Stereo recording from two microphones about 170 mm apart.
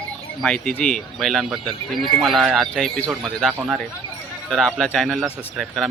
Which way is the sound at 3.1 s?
5° right (ahead or behind).